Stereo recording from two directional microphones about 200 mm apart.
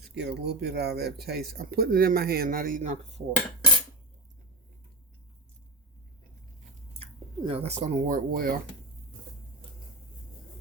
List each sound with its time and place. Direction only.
0.0 s speech: 55° right (ahead or behind); by 3.2 s 35° right (ahead or behind)
7.0 s speech: 30° right (ahead or behind); by 8.5 s 45° right (ahead or behind)